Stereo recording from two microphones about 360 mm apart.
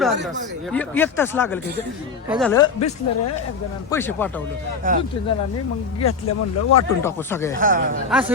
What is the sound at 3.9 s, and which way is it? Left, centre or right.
Speech, centre.